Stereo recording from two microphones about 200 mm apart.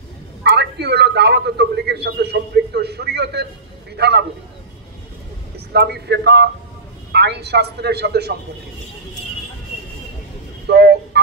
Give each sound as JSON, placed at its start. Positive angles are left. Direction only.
{"t": 0.4, "sound": "a man's voice", "side_deg": -55}
{"t": 5.7, "sound": "a man's voice", "side_deg": -55}
{"t": 10.7, "sound": "a sound", "side_deg": -55}